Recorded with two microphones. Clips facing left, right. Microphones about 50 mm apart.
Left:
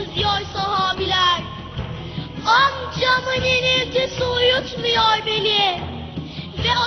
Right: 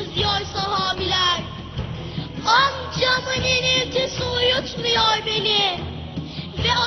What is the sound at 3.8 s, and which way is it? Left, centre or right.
Music, centre.